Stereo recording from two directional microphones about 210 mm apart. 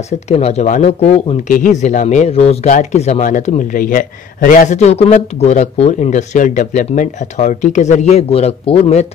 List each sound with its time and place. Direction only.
0.3 s speech: 30° left (ahead or behind)